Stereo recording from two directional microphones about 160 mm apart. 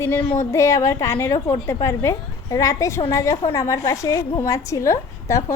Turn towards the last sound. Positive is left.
turn(degrees=20)  # may be behind; listen again after turning